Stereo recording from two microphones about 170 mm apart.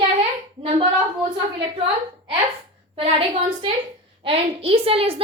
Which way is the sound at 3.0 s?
30° right (ahead or behind).